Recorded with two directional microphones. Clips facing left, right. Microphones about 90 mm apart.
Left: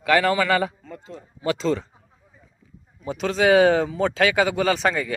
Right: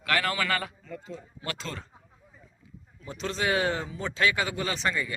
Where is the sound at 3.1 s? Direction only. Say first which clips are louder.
Left 10 dB; 90° left.